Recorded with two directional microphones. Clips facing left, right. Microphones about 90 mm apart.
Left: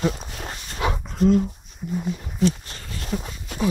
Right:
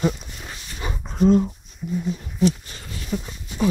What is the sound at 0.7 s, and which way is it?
Dog, 75° left (ahead or behind).